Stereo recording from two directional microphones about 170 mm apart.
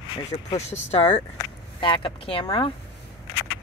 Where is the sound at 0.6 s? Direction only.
40° left (ahead or behind).